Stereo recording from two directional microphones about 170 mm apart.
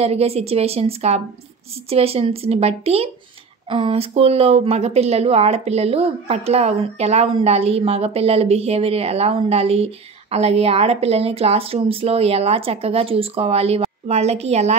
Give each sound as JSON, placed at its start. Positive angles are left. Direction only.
{"t": 0.0, "sound": "speech", "side_deg": -35}